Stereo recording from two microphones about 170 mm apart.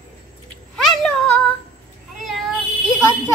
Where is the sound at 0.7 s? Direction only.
5° left (ahead or behind).